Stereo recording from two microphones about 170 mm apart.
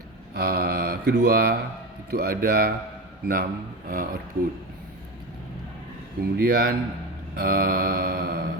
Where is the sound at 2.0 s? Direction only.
65° right (ahead or behind).